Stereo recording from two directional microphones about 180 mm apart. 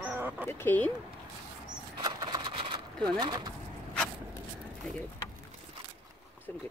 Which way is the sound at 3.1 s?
20° right (ahead or behind).